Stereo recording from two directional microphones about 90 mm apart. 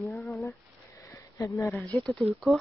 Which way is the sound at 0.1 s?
Centre (ahead or behind).